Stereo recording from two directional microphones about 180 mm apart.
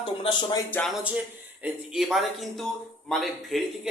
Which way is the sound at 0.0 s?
30° left (ahead or behind).